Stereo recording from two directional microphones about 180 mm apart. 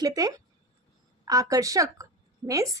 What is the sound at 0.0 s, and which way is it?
A woman's voice, 20° right (ahead or behind).